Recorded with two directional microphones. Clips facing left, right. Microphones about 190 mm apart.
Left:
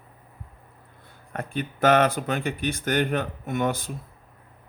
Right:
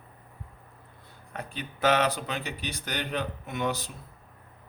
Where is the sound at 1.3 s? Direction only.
50° left (ahead or behind).